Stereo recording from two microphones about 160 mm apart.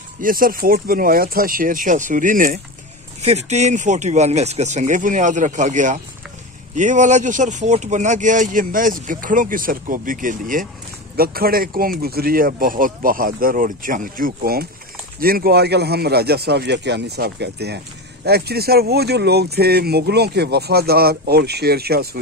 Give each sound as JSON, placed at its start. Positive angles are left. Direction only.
{"t": 0.2, "sound": "speech", "side_deg": -60}
{"t": 3.2, "sound": "speech", "side_deg": -45}
{"t": 11.1, "sound": "speech", "side_deg": -70}